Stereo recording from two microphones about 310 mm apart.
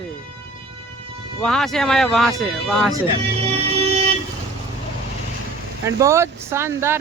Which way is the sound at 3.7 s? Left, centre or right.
Centre.